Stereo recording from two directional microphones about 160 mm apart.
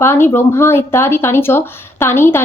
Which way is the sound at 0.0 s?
15° left (ahead or behind).